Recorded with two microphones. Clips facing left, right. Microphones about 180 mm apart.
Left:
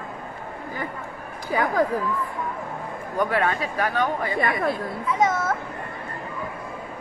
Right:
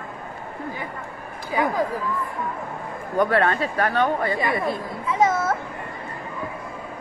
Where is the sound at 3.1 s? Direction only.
10° left (ahead or behind).